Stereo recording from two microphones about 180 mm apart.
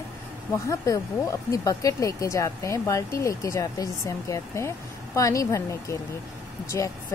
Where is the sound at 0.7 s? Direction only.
20° left (ahead or behind).